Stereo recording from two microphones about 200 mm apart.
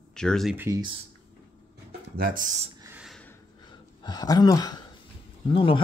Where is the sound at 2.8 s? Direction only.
5° right (ahead or behind).